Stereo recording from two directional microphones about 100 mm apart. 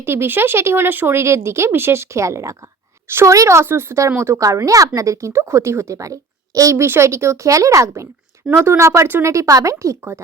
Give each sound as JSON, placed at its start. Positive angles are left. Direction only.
{"t": 0.0, "sound": "a child's voice", "side_deg": -25}